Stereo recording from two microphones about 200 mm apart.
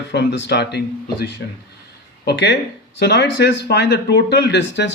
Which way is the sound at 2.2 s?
55° left (ahead or behind).